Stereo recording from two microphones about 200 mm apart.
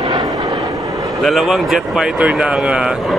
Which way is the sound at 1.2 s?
Centre (ahead or behind).